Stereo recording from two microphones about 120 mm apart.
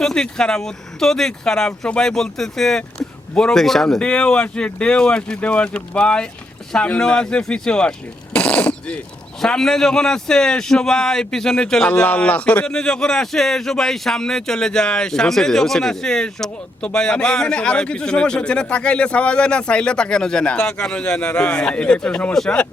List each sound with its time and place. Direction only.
0.0 s a man's voice: 5° left (ahead or behind)